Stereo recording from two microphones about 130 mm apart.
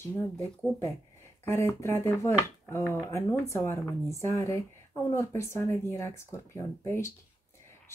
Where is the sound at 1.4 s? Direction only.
20° left (ahead or behind).